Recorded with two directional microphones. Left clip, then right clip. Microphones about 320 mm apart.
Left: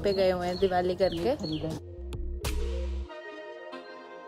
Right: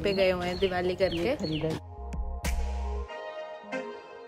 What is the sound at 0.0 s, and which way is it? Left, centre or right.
Speech, centre.